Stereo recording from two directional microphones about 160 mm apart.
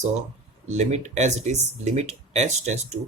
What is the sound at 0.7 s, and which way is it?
Speech, 45° right (ahead or behind).